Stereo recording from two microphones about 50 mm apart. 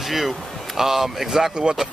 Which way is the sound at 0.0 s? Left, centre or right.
Centre.